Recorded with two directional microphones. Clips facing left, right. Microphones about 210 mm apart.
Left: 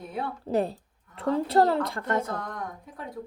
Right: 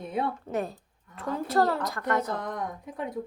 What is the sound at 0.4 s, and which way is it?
Speech, 30° left (ahead or behind).